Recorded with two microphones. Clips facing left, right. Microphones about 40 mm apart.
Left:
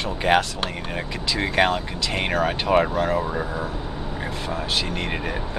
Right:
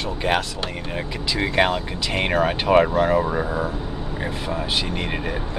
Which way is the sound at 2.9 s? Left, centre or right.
Right.